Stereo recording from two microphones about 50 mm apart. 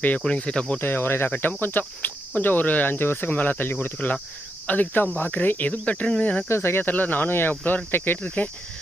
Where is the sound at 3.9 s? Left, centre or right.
Left.